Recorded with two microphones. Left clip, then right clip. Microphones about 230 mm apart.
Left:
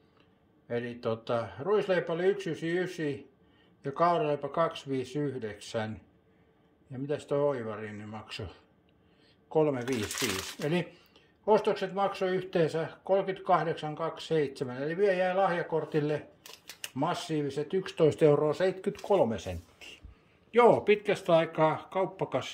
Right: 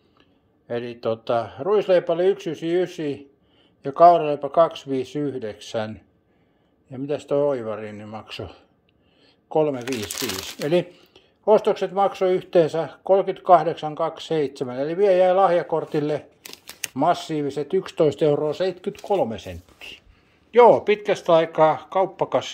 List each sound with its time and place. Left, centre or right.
0.7 s speech: centre
9.8 s speech: right
10.7 s speech: centre